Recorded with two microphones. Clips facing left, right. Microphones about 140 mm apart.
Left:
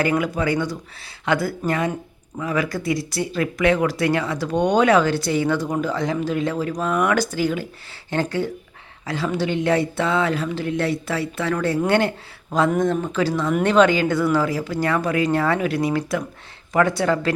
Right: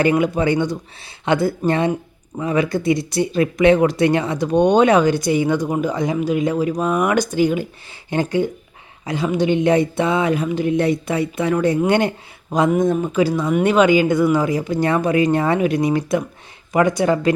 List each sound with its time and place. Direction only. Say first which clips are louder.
0.0 s speech: right 4 dB; 20° right (ahead or behind)